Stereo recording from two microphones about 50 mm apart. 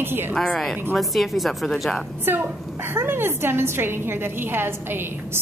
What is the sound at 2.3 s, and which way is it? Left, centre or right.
A woman's voice, right.